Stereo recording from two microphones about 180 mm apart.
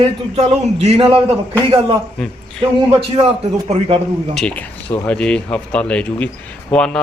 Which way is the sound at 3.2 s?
30° right (ahead or behind).